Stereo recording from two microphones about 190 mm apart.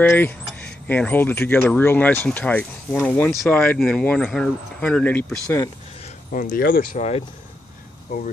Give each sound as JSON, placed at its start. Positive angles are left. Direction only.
{"t": 0.0, "sound": "speech", "side_deg": 10}
{"t": 6.0, "sound": "speech", "side_deg": 45}
{"t": 7.0, "sound": "speech", "side_deg": 30}